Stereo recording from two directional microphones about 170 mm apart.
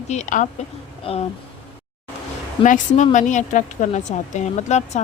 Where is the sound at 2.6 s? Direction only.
45° left (ahead or behind).